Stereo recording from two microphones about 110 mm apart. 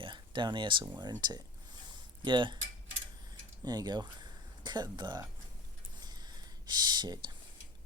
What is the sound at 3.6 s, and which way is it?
Speech, 40° right (ahead or behind).